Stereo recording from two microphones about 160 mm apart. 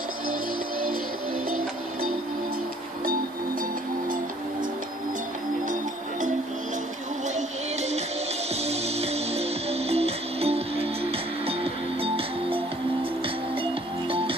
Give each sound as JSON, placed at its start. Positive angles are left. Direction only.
{"t": 8.6, "sound": "music", "side_deg": -40}